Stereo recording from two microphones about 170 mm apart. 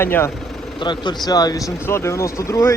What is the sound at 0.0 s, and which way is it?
Speech, 15° left (ahead or behind).